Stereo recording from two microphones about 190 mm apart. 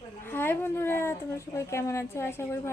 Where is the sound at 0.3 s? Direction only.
10° left (ahead or behind).